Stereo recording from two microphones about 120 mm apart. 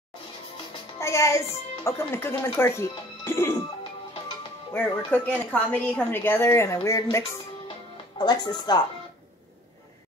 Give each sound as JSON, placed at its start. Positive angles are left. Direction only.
{"t": 0.9, "sound": "music", "side_deg": 25}
{"t": 1.9, "sound": "speech", "side_deg": 20}
{"t": 4.7, "sound": "a woman's voice", "side_deg": 15}
{"t": 8.2, "sound": "speech", "side_deg": 40}